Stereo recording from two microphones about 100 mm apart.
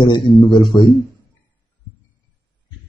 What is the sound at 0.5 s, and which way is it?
Speech, 50° left (ahead or behind).